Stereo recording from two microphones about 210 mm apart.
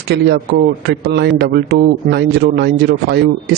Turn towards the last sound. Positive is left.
turn(degrees=-50)  # may be behind; listen again after turning